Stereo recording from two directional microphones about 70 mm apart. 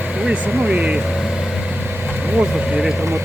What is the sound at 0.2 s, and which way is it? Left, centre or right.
Speech, centre.